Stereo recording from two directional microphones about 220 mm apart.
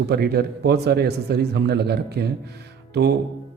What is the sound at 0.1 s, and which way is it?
A man's voice, 45° right (ahead or behind).